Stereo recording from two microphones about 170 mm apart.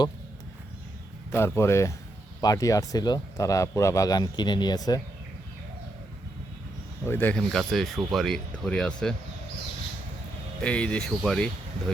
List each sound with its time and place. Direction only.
1.3 s speech: 15° left (ahead or behind)
7.0 s speech: 10° left (ahead or behind)
10.6 s speech: 5° left (ahead or behind)